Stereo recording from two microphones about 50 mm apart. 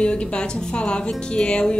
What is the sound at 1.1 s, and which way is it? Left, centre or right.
Music, centre.